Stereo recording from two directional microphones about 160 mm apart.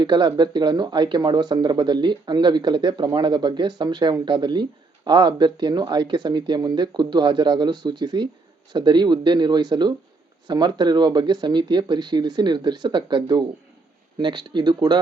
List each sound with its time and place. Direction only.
0.0 s speech: 25° right (ahead or behind)